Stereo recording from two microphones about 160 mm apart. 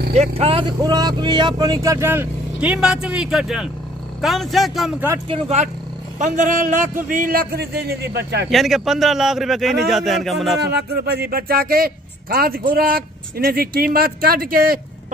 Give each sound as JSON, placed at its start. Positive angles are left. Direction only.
{"t": 0.1, "sound": "speech", "side_deg": -40}
{"t": 5.3, "sound": "speech", "side_deg": -45}
{"t": 8.5, "sound": "speech", "side_deg": 0}
{"t": 10.6, "sound": "speech", "side_deg": -90}